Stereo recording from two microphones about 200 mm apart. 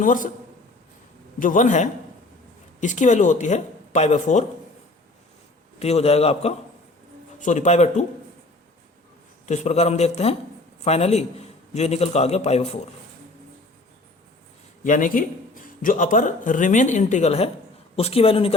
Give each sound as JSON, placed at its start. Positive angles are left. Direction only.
{"t": 0.0, "sound": "speech", "side_deg": 40}
{"t": 1.4, "sound": "speech", "side_deg": 40}
{"t": 5.8, "sound": "speech", "side_deg": 30}
{"t": 9.5, "sound": "speech", "side_deg": 35}
{"t": 14.8, "sound": "a man's voice", "side_deg": 40}